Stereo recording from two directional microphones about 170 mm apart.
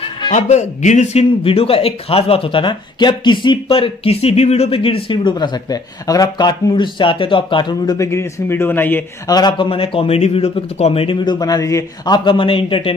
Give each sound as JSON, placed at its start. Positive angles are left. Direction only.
{"t": 0.3, "sound": "speech", "side_deg": 45}
{"t": 9.3, "sound": "speech", "side_deg": 25}